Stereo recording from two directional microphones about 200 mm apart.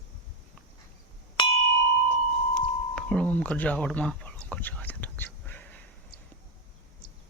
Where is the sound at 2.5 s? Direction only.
5° left (ahead or behind).